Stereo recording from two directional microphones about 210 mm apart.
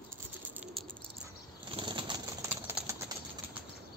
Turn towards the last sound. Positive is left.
turn(degrees=-15)  # may be behind; listen again after turning